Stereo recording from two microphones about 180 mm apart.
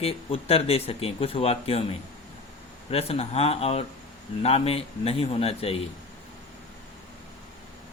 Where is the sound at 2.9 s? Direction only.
35° left (ahead or behind).